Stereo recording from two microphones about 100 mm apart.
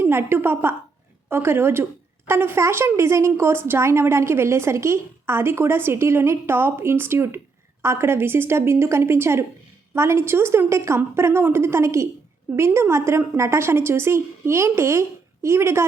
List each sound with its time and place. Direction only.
0.0 s a woman's voice: 25° right (ahead or behind)